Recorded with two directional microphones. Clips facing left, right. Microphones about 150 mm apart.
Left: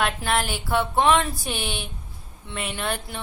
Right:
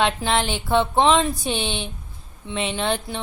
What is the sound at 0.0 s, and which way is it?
Speech, 25° right (ahead or behind).